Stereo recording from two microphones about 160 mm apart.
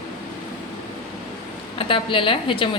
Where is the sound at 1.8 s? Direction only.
35° left (ahead or behind).